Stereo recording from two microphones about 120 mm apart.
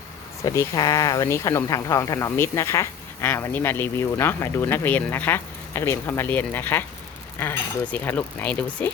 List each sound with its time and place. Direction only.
0.4 s speech: 25° left (ahead or behind)